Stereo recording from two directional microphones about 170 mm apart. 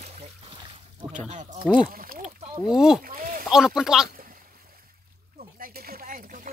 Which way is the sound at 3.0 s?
55° right (ahead or behind).